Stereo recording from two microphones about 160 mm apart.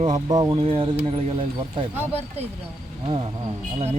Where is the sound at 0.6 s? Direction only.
35° right (ahead or behind).